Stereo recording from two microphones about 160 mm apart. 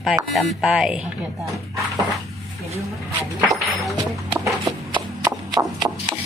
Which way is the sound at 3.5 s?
Centre (ahead or behind).